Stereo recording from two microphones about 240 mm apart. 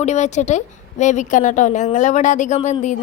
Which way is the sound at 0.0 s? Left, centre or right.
Left.